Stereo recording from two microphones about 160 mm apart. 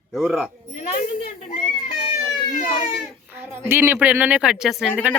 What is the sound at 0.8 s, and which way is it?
A child's voice, 45° left (ahead or behind).